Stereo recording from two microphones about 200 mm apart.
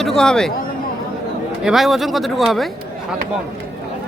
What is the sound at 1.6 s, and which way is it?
Speech, centre (ahead or behind).